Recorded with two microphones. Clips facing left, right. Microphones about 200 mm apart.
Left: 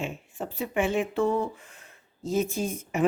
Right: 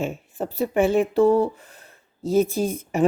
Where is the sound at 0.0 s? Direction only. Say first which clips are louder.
Right 6 dB; 40° right (ahead or behind).